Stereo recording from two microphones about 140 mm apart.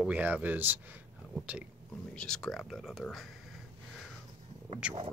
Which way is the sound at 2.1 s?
5° left (ahead or behind).